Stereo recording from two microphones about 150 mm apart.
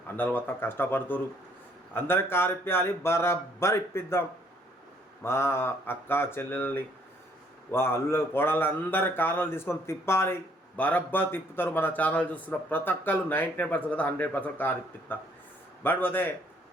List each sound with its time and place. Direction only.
0.2 s speech: 10° left (ahead or behind)
5.2 s speech: 15° left (ahead or behind)